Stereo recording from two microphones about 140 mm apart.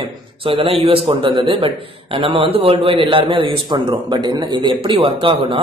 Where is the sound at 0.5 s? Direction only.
40° right (ahead or behind).